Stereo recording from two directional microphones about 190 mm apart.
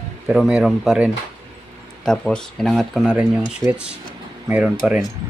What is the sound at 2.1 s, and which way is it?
Speech, 5° left (ahead or behind).